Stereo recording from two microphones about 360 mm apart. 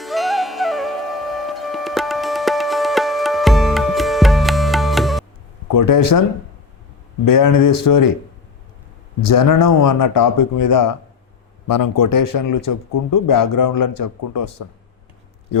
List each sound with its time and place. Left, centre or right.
0.0 s music: centre
5.6 s speech: left
7.3 s speech: left
9.2 s speech: left